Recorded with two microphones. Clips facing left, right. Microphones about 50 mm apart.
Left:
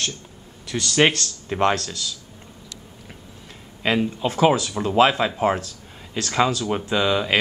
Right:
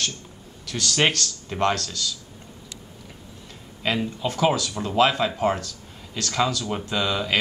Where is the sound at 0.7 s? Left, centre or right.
Centre.